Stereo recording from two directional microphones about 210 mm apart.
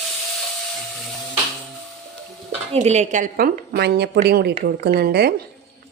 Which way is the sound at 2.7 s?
30° right (ahead or behind).